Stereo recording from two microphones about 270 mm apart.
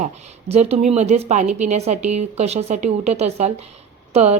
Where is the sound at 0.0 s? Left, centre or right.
Right.